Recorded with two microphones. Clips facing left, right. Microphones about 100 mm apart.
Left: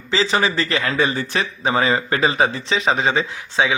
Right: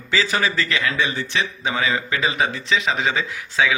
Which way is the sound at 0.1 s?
25° left (ahead or behind).